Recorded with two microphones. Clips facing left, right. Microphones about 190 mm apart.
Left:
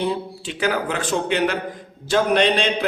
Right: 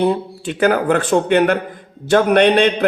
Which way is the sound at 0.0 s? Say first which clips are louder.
Right 7 dB; 55° right (ahead or behind).